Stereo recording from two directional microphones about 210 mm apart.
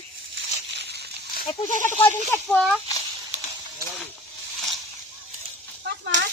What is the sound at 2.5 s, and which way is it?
Speech, 5° left (ahead or behind).